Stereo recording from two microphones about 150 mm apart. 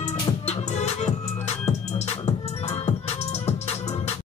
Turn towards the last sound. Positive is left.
turn(degrees=45)  # may be behind; listen again after turning